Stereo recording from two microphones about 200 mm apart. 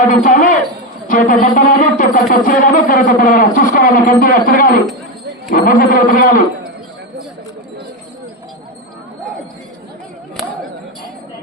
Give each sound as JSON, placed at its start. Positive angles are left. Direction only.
{"t": 0.1, "sound": "speech", "side_deg": 40}